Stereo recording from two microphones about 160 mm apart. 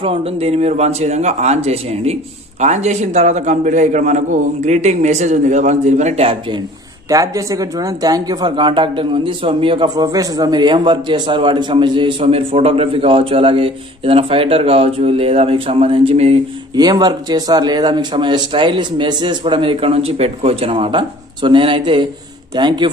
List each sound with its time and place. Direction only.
0.0 s a man's voice: 35° right (ahead or behind)
7.1 s speech: 20° right (ahead or behind); by 16.3 s 40° right (ahead or behind)
16.7 s a man's voice: 25° right (ahead or behind)